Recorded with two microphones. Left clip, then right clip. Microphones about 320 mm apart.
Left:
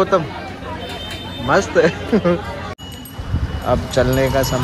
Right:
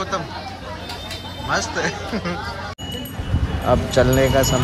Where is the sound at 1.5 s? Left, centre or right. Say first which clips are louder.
Left 8 dB; left.